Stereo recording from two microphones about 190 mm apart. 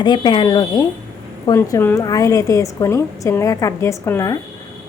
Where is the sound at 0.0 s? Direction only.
25° left (ahead or behind).